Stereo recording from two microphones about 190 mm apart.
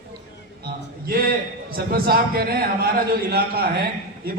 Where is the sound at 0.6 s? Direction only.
50° right (ahead or behind).